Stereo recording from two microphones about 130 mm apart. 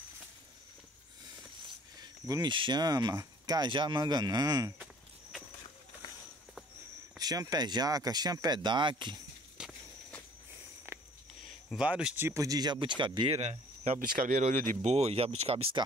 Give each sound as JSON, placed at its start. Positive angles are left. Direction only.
{"t": 2.2, "sound": "speech", "side_deg": -30}
{"t": 7.2, "sound": "speech", "side_deg": -30}
{"t": 9.6, "sound": "walk", "side_deg": -5}
{"t": 11.7, "sound": "speech", "side_deg": -5}
{"t": 12.3, "sound": "speech", "side_deg": -25}
{"t": 13.4, "sound": "speech", "side_deg": -65}